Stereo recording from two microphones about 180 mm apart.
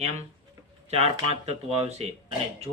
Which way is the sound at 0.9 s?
35° right (ahead or behind).